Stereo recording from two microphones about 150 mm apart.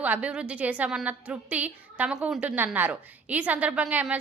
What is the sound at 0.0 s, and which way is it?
A woman's voice, 10° right (ahead or behind).